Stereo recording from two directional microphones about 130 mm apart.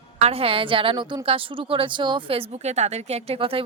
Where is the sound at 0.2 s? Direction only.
50° right (ahead or behind).